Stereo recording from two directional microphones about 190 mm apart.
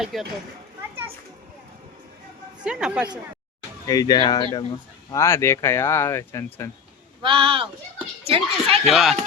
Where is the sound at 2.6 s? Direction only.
5° right (ahead or behind).